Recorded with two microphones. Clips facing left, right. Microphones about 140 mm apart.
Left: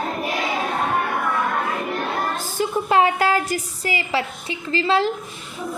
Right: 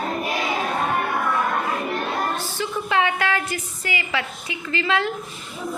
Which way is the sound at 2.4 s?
45° left (ahead or behind).